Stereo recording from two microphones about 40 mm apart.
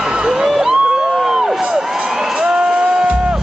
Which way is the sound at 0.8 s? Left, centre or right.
Centre.